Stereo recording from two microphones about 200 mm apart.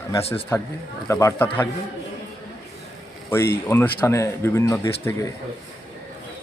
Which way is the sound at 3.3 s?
10° left (ahead or behind).